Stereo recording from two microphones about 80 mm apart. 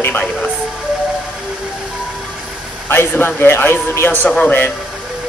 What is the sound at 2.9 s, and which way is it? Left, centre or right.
A man's voice, left.